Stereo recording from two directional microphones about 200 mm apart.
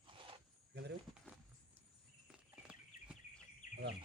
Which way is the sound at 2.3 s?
5° right (ahead or behind).